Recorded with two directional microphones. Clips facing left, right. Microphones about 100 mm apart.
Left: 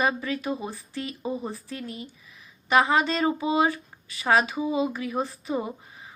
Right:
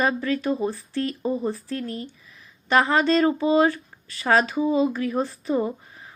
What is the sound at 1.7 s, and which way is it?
Speech, 15° left (ahead or behind).